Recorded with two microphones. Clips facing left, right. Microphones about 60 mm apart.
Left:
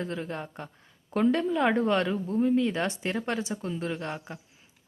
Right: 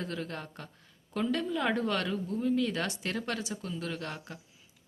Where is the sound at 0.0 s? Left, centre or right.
Left.